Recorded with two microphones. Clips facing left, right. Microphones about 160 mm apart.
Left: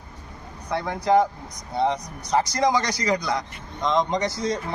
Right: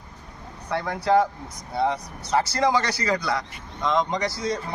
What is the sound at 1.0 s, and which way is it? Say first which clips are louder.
A man's voice: left 1 dB; 15° left (ahead or behind).